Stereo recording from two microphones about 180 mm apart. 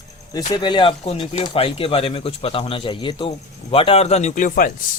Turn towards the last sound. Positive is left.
turn(degrees=50)  # may be behind; listen again after turning